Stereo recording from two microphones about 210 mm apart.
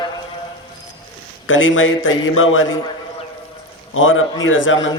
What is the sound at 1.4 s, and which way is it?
A man's voice, 65° left (ahead or behind).